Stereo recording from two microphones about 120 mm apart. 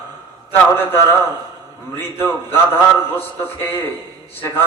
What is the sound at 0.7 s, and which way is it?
A man's voice, 15° left (ahead or behind).